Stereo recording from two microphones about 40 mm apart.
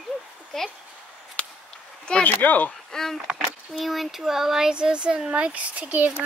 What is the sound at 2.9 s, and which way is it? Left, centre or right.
Speech, centre.